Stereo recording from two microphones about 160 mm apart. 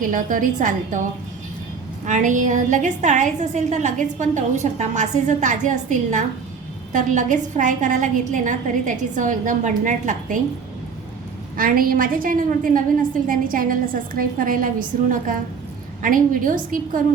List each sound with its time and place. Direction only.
0.0 s a woman's voice: 55° right (ahead or behind)
2.0 s a woman's voice: 50° right (ahead or behind)
11.5 s a woman's voice: 60° right (ahead or behind)